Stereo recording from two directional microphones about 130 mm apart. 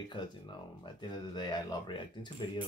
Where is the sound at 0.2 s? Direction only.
35° left (ahead or behind).